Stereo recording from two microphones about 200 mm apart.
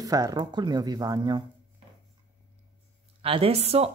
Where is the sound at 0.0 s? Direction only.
20° right (ahead or behind).